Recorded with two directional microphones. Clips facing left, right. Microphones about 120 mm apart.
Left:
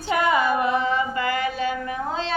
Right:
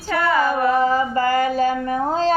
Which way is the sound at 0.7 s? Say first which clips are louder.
Right 5 dB; 40° right (ahead or behind).